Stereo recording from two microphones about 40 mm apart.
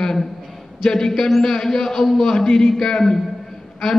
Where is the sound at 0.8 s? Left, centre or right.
Centre.